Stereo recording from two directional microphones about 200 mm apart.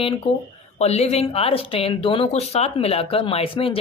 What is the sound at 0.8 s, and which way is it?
Speech, 30° left (ahead or behind).